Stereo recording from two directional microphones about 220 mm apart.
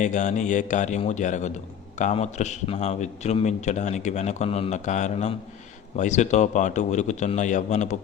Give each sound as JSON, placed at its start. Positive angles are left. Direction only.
{"t": 0.0, "sound": "a man's voice", "side_deg": 35}